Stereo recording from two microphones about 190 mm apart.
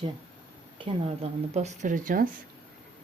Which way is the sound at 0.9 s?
30° right (ahead or behind).